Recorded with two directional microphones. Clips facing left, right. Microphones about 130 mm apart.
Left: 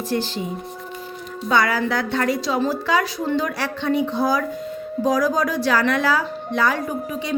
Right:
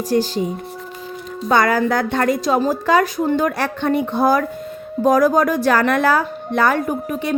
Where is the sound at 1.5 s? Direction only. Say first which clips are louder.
Right 4 dB; 45° right (ahead or behind).